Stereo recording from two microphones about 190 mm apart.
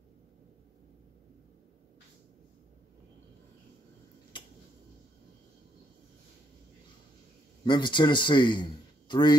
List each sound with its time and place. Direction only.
7.6 s a man's voice: 25° left (ahead or behind)